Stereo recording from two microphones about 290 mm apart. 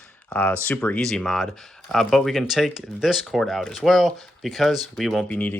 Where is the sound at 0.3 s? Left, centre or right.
Centre.